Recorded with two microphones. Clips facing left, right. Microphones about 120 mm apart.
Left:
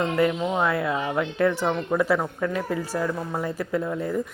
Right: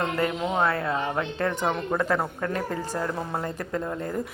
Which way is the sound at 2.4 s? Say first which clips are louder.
Left 2 dB; 5° left (ahead or behind).